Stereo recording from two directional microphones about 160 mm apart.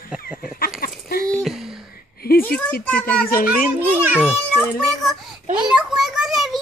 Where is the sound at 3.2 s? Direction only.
65° left (ahead or behind).